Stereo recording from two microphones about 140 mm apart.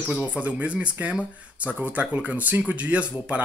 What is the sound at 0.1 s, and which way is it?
Speech, 10° right (ahead or behind).